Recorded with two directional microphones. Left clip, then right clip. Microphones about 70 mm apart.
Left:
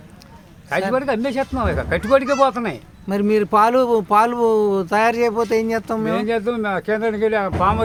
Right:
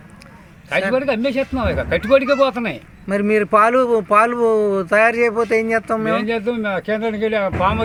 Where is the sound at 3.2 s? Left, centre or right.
Left.